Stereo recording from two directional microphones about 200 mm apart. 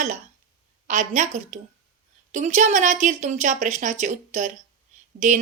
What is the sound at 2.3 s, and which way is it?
A woman's voice, 35° right (ahead or behind).